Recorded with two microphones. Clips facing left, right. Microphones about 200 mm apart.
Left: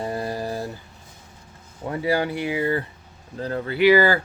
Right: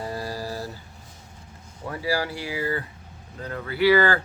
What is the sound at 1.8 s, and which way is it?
Speech, 25° left (ahead or behind).